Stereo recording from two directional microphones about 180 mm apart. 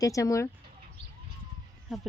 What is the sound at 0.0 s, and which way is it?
Speech, 20° left (ahead or behind).